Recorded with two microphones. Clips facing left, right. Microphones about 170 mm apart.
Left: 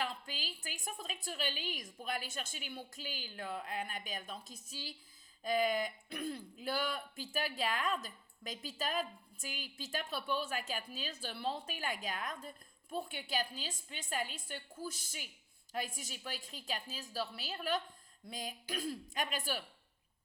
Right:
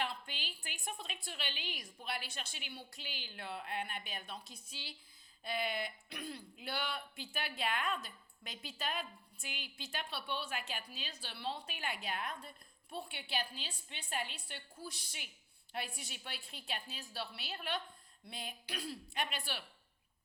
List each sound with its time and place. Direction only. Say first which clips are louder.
0.0 s a woman's voice: left 1 dB; 40° left (ahead or behind)